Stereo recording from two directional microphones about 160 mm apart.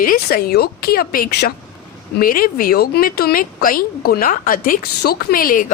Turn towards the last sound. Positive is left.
turn(degrees=60)  # may be behind; listen again after turning